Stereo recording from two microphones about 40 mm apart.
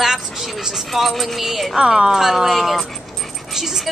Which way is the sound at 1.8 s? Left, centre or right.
Centre.